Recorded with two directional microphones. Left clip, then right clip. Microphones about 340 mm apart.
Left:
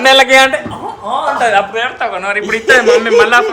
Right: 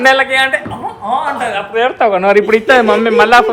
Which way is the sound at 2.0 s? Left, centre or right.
Centre.